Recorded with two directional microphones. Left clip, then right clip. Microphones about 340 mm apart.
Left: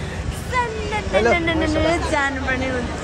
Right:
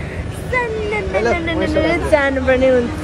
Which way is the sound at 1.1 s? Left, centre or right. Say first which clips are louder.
Left 2 dB; left.